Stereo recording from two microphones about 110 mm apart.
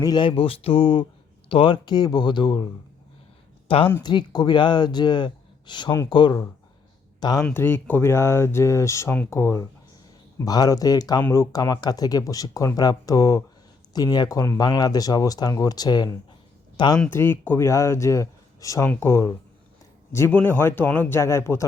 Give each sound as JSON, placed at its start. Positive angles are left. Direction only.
{"t": 0.0, "sound": "speech", "side_deg": 40}
{"t": 3.7, "sound": "speech", "side_deg": 55}
{"t": 4.0, "sound": "speech", "side_deg": 40}
{"t": 7.5, "sound": "speech", "side_deg": 20}
{"t": 17.1, "sound": "speech", "side_deg": 20}